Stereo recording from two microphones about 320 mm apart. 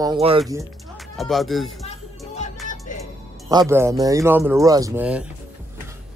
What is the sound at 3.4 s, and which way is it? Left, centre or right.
Speech, centre.